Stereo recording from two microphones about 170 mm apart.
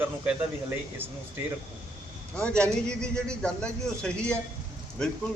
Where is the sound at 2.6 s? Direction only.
5° left (ahead or behind).